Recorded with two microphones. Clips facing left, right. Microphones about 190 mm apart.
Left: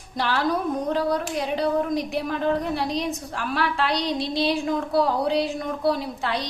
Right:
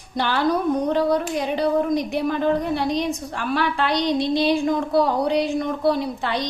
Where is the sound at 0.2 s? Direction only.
Centre (ahead or behind).